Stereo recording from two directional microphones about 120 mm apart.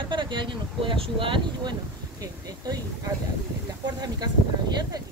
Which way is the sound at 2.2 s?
30° right (ahead or behind).